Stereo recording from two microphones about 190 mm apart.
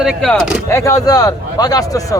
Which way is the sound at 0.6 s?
15° left (ahead or behind).